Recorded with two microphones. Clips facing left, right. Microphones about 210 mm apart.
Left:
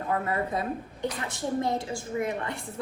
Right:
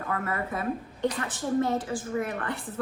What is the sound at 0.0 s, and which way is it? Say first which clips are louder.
Speech: left 3 dB; 25° left (ahead or behind).